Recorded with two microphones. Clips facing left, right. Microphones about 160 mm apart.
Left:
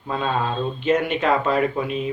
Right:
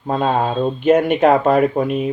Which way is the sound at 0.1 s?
50° right (ahead or behind).